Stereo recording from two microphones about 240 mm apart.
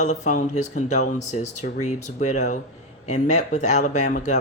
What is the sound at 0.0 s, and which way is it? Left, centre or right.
Speech, left.